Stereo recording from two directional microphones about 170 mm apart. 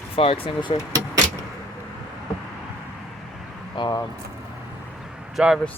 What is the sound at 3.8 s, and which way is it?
Speech, 25° left (ahead or behind).